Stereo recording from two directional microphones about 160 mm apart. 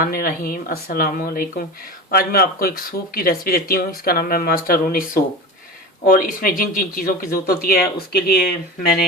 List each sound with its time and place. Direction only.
0.0 s speech: 65° left (ahead or behind)